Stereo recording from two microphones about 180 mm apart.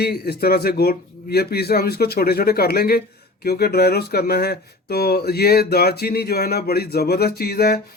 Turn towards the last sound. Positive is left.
turn(degrees=60)  # may be behind; listen again after turning